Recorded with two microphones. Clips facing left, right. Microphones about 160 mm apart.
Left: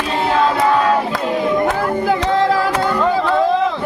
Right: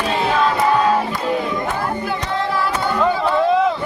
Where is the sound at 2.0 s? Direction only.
90° left.